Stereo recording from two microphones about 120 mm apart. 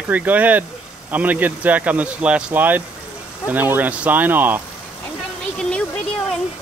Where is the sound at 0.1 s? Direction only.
15° right (ahead or behind).